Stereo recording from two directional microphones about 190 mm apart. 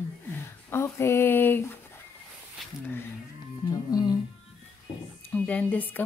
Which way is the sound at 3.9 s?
20° left (ahead or behind).